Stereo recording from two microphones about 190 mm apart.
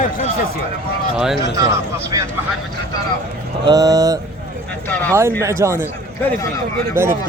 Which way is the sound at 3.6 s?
20° right (ahead or behind).